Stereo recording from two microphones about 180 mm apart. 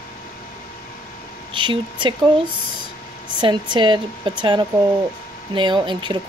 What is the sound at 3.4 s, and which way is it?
Speech, 25° right (ahead or behind).